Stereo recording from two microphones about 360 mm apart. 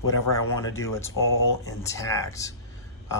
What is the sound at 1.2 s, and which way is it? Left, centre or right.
Speech, left.